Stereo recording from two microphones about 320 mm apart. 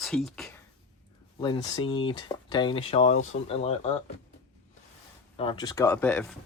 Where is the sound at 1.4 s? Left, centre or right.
Centre.